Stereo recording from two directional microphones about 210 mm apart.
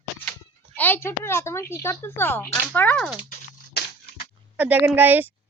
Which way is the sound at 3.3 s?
50° left (ahead or behind).